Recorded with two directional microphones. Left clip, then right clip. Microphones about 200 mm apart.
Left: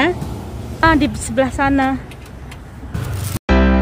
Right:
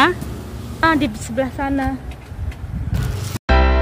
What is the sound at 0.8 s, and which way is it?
A woman's voice, 5° left (ahead or behind).